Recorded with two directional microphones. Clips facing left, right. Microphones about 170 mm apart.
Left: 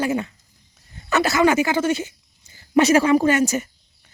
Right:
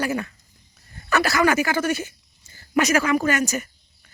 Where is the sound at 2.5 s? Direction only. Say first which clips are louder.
Left 3 dB; 15° left (ahead or behind).